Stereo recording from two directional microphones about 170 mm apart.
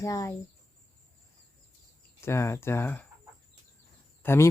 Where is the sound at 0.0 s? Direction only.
20° left (ahead or behind).